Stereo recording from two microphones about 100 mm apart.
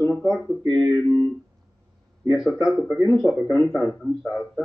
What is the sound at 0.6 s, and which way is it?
Music, 40° right (ahead or behind).